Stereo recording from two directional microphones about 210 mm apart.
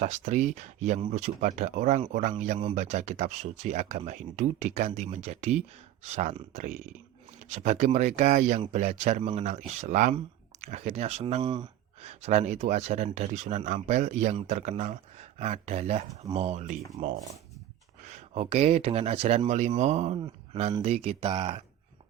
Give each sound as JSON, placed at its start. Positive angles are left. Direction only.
{"t": 0.0, "sound": "speech", "side_deg": -35}
{"t": 11.5, "sound": "gasp", "side_deg": -20}
{"t": 12.2, "sound": "speech", "side_deg": -35}